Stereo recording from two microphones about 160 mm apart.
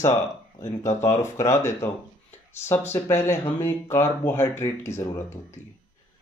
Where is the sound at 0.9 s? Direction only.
20° left (ahead or behind).